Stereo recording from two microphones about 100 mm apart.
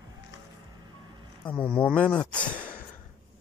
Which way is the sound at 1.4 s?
10° left (ahead or behind).